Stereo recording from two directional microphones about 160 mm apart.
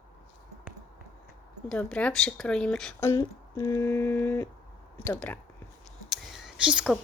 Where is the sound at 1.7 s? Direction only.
10° left (ahead or behind).